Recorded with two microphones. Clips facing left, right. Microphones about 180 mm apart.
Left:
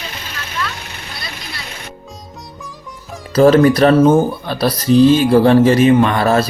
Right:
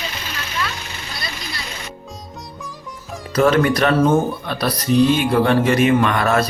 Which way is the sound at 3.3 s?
30° left (ahead or behind).